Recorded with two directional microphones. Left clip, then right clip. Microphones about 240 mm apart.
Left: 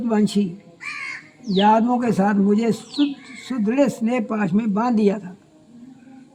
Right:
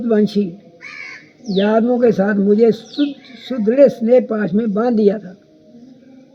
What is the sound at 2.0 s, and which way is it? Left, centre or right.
Speech, left.